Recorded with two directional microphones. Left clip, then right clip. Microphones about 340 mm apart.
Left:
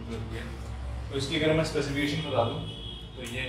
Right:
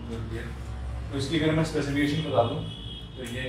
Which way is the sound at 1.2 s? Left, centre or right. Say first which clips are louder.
Even; centre.